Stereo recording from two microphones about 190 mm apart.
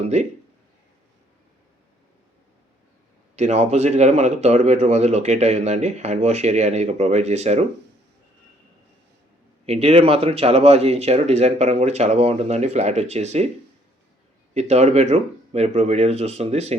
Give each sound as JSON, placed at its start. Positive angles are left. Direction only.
{"t": 0.0, "sound": "speech", "side_deg": -35}
{"t": 3.3, "sound": "speech", "side_deg": -35}
{"t": 9.6, "sound": "speech", "side_deg": -30}
{"t": 14.5, "sound": "speech", "side_deg": -35}